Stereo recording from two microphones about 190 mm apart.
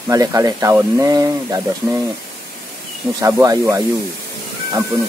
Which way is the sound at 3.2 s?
15° right (ahead or behind).